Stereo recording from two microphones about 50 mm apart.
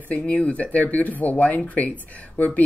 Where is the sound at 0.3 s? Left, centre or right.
Left.